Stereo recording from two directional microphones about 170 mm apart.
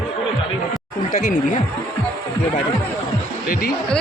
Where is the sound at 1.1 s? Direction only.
50° left (ahead or behind).